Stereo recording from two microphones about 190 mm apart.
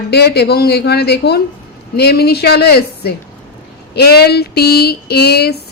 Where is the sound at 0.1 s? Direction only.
60° left (ahead or behind).